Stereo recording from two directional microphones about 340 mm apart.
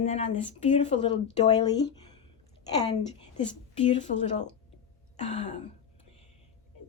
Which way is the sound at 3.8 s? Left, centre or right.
Centre.